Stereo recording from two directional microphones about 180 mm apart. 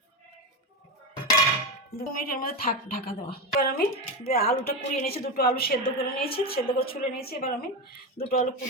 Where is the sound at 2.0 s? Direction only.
55° left (ahead or behind).